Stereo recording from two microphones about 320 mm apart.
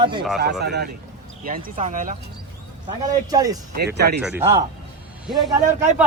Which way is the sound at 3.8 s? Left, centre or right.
Right.